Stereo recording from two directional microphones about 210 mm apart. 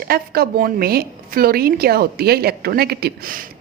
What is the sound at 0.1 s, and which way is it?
A woman's voice, 45° right (ahead or behind).